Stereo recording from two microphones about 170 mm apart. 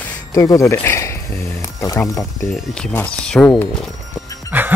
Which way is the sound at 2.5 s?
5° left (ahead or behind).